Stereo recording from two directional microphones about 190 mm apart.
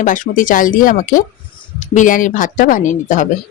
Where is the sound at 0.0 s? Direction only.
45° left (ahead or behind).